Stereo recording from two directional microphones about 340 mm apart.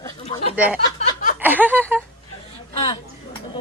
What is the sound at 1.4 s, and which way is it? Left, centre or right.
Speech, centre.